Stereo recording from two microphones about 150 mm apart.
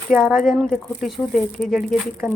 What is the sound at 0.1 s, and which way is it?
Speech, centre (ahead or behind).